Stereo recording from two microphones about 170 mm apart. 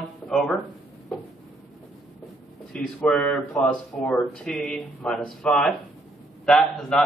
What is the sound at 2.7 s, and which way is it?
Speech, 5° left (ahead or behind).